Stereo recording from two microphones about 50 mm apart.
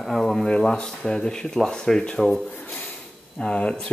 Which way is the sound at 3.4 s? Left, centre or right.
Left.